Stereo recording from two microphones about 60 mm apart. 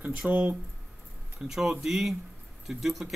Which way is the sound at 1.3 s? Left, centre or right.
Centre.